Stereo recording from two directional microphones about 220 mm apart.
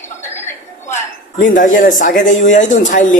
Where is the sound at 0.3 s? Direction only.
10° left (ahead or behind).